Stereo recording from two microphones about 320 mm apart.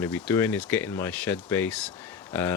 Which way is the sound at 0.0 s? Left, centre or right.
Centre.